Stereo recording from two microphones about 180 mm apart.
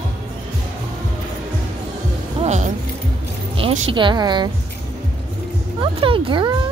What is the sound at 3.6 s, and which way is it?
Speech, 30° right (ahead or behind).